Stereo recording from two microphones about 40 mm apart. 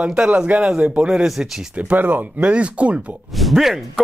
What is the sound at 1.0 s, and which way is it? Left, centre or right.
Speech, centre.